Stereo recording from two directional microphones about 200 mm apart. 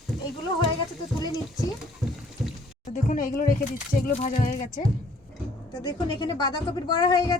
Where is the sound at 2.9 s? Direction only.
45° left (ahead or behind).